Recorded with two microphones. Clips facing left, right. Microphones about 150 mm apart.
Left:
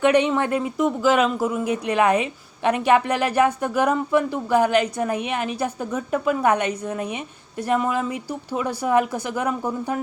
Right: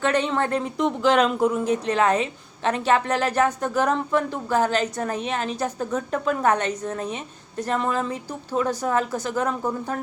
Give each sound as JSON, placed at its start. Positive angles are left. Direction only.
{"t": 0.0, "sound": "speech", "side_deg": 15}